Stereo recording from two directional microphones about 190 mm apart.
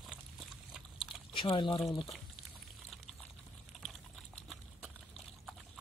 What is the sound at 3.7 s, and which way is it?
Typing, centre (ahead or behind).